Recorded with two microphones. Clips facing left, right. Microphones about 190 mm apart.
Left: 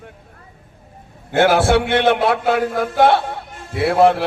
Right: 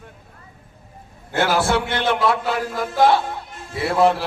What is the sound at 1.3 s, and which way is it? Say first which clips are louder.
A man's voice: left 5 dB; 60° left (ahead or behind).